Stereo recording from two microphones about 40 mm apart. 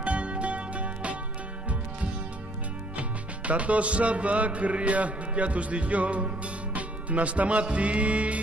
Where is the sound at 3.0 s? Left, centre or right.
Right.